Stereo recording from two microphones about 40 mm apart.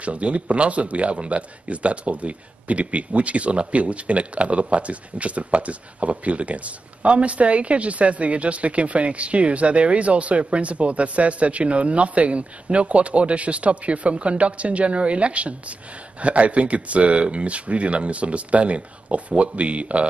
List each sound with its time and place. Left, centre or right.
0.0 s speech: right